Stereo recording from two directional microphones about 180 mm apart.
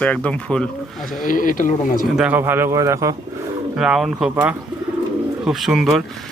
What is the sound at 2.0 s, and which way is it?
Speech, 5° right (ahead or behind).